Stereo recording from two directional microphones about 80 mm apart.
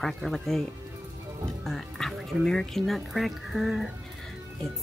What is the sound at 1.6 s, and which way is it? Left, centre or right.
Music, centre.